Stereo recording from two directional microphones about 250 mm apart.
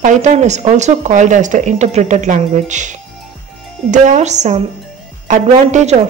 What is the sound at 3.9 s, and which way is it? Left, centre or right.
Speech, right.